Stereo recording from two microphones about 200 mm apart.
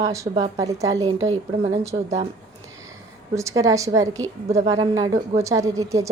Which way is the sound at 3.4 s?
15° right (ahead or behind).